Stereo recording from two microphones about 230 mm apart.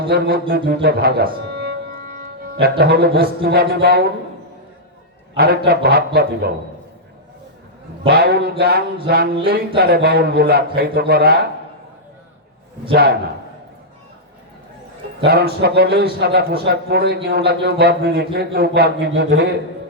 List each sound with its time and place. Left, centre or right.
0.1 s speech: right
5.4 s a man's voice: right
8.0 s a man's voice: right
12.9 s a man's voice: right
15.2 s a man's voice: right